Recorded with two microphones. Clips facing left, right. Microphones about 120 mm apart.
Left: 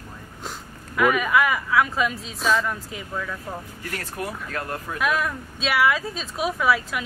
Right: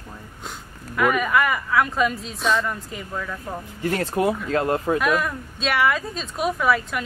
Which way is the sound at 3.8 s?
25° right (ahead or behind).